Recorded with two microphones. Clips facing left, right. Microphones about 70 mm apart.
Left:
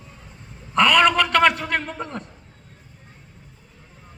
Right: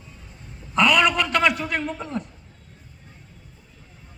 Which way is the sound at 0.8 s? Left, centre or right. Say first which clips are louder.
Left 2 dB; left.